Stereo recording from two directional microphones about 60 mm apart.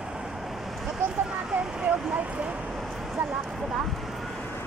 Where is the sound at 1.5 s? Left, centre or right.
Centre.